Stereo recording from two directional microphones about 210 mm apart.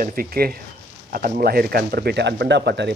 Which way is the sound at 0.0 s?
45° right (ahead or behind).